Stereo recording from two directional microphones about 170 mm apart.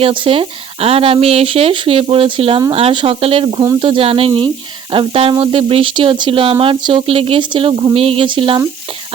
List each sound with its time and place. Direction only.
0.0 s speech: 30° right (ahead or behind)